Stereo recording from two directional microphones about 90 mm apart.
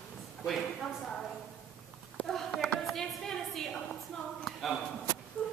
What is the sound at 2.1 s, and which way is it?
A woman's voice, 5° left (ahead or behind).